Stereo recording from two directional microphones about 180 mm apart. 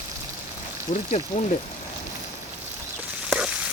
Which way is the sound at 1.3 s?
40° left (ahead or behind).